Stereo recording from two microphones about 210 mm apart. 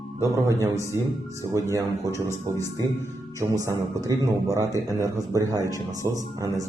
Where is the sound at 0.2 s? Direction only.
15° right (ahead or behind).